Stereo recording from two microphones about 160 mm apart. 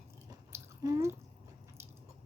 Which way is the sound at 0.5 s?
20° right (ahead or behind).